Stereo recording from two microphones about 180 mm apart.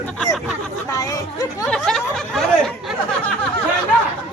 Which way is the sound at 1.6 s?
5° left (ahead or behind).